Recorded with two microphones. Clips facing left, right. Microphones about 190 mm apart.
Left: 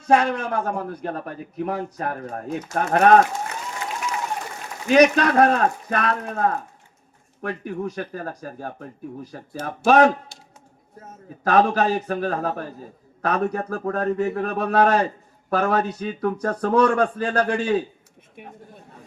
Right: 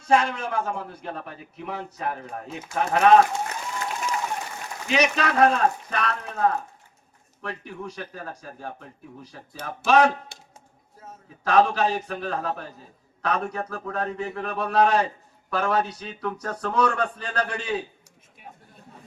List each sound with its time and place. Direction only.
0.3 s a man's voice: 55° left (ahead or behind)
4.9 s a man's voice: 50° left (ahead or behind)
10.3 s music: 60° right (ahead or behind)
11.4 s a man's voice: 45° left (ahead or behind)
18.4 s speech: 60° left (ahead or behind)